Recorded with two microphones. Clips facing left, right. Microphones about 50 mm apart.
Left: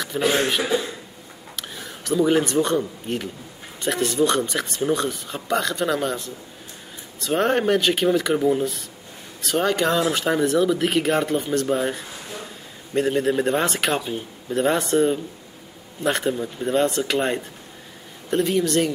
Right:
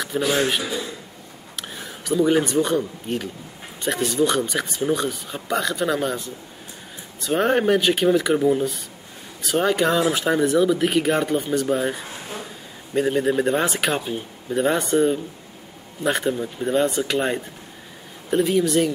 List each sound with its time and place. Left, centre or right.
0.2 s a man's voice: left
1.9 s speech: centre